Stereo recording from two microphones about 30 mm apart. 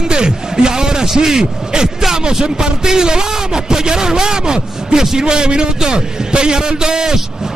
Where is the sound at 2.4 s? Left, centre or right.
Right.